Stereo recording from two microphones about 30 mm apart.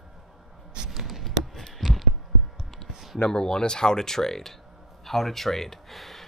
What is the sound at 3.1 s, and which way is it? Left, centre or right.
Speech, left.